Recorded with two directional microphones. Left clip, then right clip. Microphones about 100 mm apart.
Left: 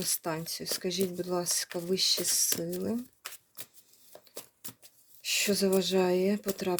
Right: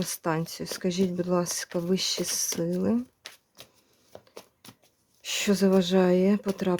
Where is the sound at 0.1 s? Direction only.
55° right (ahead or behind).